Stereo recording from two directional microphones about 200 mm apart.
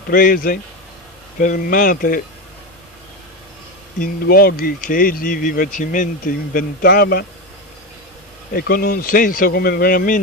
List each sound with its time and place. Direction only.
0.1 s speech: 45° left (ahead or behind)
4.0 s speech: 50° left (ahead or behind)
8.5 s speech: 50° left (ahead or behind)